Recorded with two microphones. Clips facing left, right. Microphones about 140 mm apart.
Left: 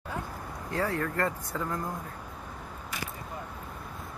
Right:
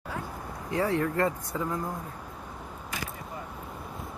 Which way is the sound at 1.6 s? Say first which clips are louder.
Right 2 dB; 5° right (ahead or behind).